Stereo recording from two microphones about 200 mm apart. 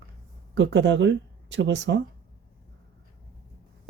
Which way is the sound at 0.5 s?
65° right (ahead or behind).